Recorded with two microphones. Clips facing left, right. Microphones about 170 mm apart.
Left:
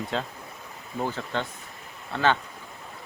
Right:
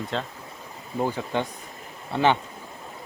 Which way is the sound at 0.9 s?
15° right (ahead or behind).